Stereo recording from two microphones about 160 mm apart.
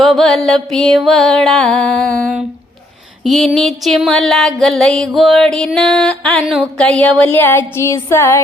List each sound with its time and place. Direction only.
0.0 s music: centre (ahead or behind)